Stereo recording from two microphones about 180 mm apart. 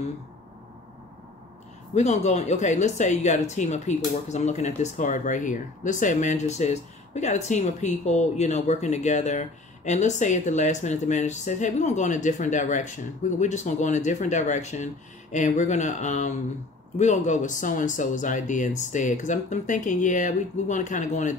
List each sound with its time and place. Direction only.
2.0 s speech: 35° left (ahead or behind)